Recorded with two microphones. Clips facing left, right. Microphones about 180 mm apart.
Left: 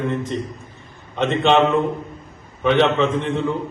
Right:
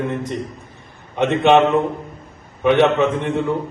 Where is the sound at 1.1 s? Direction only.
15° right (ahead or behind).